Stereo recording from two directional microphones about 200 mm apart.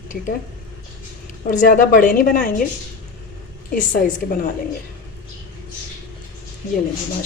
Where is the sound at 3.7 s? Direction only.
40° left (ahead or behind).